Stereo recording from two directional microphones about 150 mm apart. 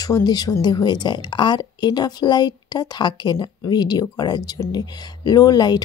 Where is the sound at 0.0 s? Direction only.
25° left (ahead or behind).